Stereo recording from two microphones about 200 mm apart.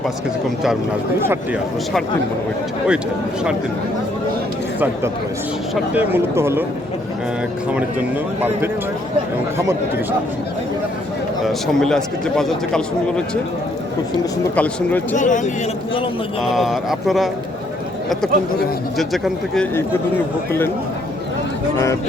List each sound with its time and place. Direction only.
5.7 s speech: 10° right (ahead or behind)
9.6 s speech: 15° right (ahead or behind)
11.4 s speech: 5° left (ahead or behind)
14.5 s speech: 5° left (ahead or behind)
15.1 s a man's voice: 40° left (ahead or behind)
16.4 s speech: centre (ahead or behind)
18.9 s speech: centre (ahead or behind)